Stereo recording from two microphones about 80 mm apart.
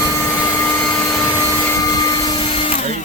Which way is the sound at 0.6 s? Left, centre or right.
Left.